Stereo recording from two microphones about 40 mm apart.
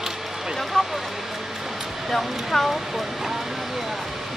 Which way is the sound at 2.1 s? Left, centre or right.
Centre.